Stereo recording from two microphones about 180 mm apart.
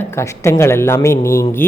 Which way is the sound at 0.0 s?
15° left (ahead or behind).